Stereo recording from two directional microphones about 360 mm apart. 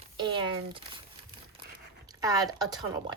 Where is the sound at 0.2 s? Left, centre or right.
Centre.